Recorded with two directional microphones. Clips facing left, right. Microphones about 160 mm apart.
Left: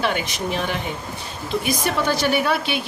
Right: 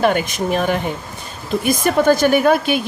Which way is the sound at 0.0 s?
50° right (ahead or behind).